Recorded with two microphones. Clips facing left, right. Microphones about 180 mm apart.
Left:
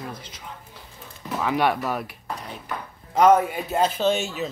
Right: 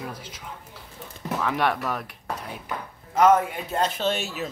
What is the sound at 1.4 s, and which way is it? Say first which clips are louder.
Speech: left 3 dB; 5° left (ahead or behind).